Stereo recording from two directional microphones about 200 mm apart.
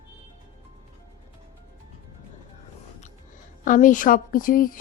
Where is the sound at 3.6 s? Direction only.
40° left (ahead or behind).